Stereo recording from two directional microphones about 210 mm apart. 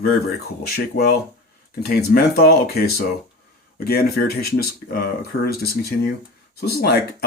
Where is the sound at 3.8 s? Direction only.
45° left (ahead or behind).